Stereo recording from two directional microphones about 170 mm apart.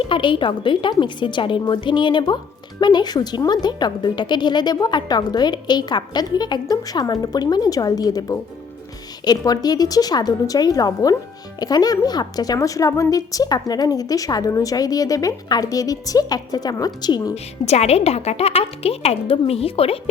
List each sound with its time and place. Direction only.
0.0 s speech: 30° left (ahead or behind)
17.3 s a woman's voice: 40° left (ahead or behind)